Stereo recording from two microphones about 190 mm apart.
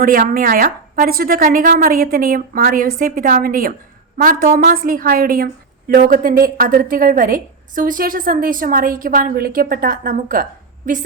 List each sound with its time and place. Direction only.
0.0 s a woman's voice: 45° right (ahead or behind)